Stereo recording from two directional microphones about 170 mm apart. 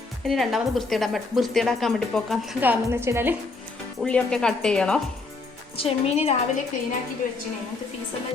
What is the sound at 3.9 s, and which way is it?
A woman's voice, 5° left (ahead or behind).